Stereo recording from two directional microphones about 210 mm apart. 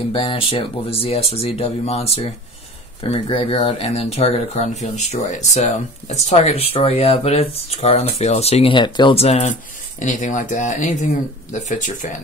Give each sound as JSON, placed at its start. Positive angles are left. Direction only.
{"t": 0.1, "sound": "speech", "side_deg": 25}